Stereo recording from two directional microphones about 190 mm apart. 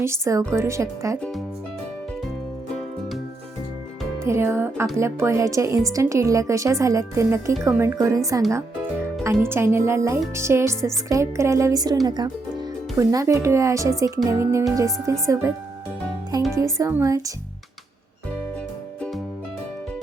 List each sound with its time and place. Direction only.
0.0 s a woman's voice: 15° right (ahead or behind)
4.2 s a woman's voice: 15° right (ahead or behind)
16.6 s a woman's voice: 15° right (ahead or behind)